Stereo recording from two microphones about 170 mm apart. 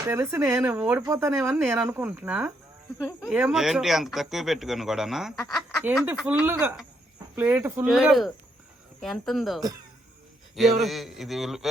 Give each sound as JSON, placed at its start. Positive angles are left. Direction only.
{"t": 0.0, "sound": "speech", "side_deg": -15}